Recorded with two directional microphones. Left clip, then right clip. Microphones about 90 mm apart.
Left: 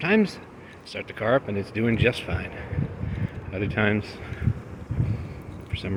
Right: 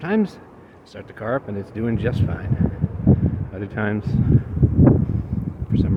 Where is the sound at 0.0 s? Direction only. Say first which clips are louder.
Left 1 dB; 35° right (ahead or behind).